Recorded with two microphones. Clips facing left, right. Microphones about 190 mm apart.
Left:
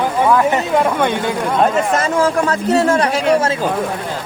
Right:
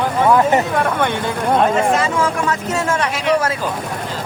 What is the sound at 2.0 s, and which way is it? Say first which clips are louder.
Speech: left 3 dB; 35° left (ahead or behind).